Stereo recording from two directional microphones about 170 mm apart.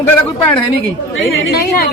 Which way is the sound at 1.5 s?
60° left (ahead or behind).